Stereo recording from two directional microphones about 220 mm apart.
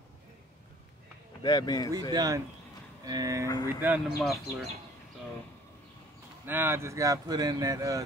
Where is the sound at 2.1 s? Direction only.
15° right (ahead or behind).